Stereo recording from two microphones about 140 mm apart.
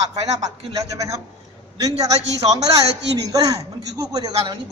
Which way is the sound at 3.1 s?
25° right (ahead or behind).